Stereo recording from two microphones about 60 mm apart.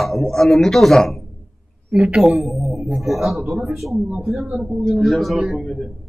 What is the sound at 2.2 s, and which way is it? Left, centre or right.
A woman's voice, centre.